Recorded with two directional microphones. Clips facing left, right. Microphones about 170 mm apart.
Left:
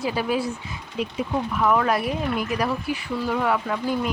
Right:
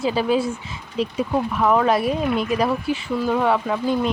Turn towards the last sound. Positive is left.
turn(degrees=-25)  # may be behind; listen again after turning